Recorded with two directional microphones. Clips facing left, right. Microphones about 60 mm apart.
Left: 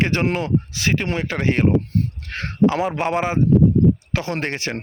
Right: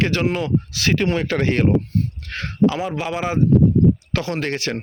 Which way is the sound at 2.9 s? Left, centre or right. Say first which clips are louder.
Left 4 dB; left.